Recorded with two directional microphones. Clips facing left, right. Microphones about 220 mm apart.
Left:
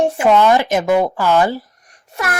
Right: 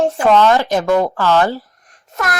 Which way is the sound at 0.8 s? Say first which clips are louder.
Even; 10° left (ahead or behind).